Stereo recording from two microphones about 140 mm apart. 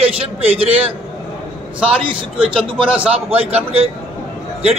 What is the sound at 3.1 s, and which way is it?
Speech, 45° right (ahead or behind).